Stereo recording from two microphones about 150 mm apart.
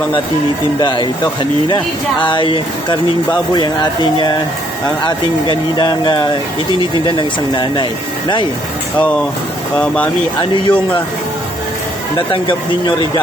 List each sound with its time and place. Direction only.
0.8 s speech: 30° left (ahead or behind)
9.0 s speech: 10° left (ahead or behind)
10.5 s speech: 35° left (ahead or behind)